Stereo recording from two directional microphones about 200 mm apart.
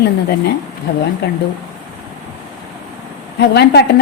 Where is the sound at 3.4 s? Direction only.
55° left (ahead or behind).